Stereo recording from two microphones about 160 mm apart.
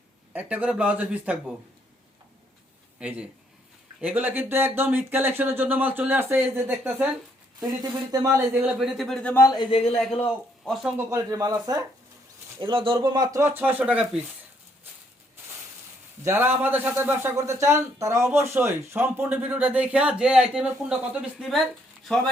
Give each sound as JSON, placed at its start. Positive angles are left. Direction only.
{"t": 0.3, "sound": "speech", "side_deg": -10}
{"t": 3.0, "sound": "speech", "side_deg": -5}
{"t": 7.8, "sound": "speech", "side_deg": -20}
{"t": 9.3, "sound": "speech", "side_deg": 20}
{"t": 10.9, "sound": "speech", "side_deg": -20}
{"t": 16.2, "sound": "speech", "side_deg": -15}